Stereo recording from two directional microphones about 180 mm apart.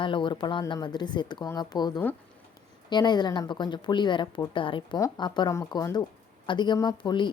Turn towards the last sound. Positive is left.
turn(degrees=25)  # may be behind; listen again after turning